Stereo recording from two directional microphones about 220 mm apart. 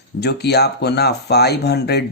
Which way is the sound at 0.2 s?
50° left (ahead or behind).